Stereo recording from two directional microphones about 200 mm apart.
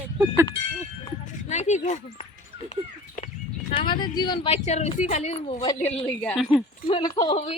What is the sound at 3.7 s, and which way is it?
Speech, 25° left (ahead or behind).